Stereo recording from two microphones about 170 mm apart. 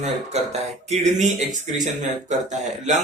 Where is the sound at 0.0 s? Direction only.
40° right (ahead or behind).